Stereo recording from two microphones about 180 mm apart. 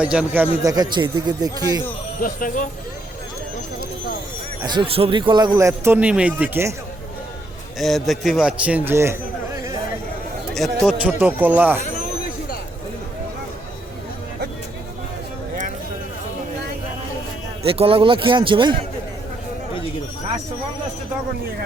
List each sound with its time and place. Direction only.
0.0 s speech: 5° right (ahead or behind)
0.6 s speech: 20° right (ahead or behind)
2.2 s speech: 50° left (ahead or behind)
4.6 s speech: 25° right (ahead or behind)
7.8 s a man's voice: centre (ahead or behind)
10.5 s speech: centre (ahead or behind)
17.6 s speech: 30° right (ahead or behind)